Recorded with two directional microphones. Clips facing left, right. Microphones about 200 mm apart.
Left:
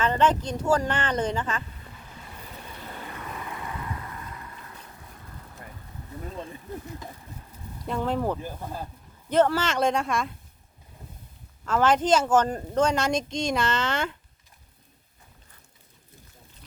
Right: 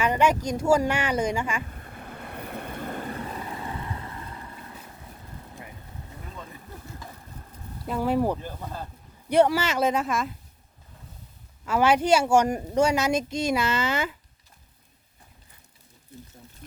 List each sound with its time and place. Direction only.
0.0 s speech: 10° right (ahead or behind)
1.7 s vehicle: 55° right (ahead or behind)
3.2 s boat: 35° right (ahead or behind)
7.9 s speech: 5° right (ahead or behind)
8.4 s speech: 10° left (ahead or behind)
9.3 s speech: 10° right (ahead or behind)
11.6 s speech: 10° right (ahead or behind)